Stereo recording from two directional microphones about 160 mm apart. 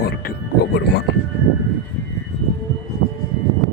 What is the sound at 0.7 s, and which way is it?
Speech, 90° left.